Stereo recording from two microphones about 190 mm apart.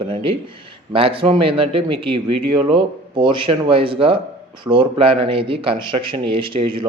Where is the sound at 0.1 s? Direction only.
30° right (ahead or behind).